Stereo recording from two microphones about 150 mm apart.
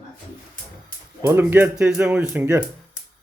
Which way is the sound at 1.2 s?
15° right (ahead or behind).